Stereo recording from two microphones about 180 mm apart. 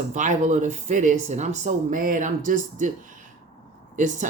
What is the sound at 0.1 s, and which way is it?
Speech, 40° right (ahead or behind).